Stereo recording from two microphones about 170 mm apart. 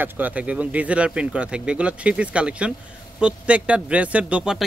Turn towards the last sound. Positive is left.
turn(degrees=-5)  # may be behind; listen again after turning